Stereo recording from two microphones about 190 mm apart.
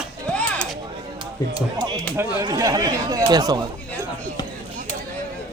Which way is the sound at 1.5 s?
20° right (ahead or behind).